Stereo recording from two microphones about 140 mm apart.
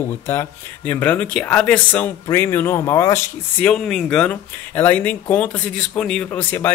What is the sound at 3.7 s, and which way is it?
Speech, 5° left (ahead or behind).